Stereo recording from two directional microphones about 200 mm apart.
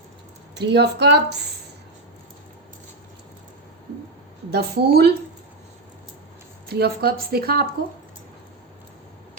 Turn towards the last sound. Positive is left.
turn(degrees=-50)  # may be behind; listen again after turning